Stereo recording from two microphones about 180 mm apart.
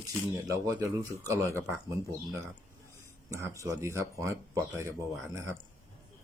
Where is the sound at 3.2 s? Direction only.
15° right (ahead or behind).